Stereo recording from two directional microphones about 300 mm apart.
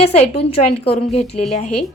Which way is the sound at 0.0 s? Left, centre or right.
Centre.